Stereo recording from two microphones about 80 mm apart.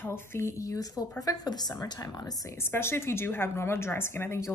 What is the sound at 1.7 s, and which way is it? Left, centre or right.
Speech, left.